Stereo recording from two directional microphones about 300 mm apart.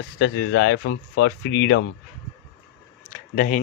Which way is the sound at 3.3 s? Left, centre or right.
Left.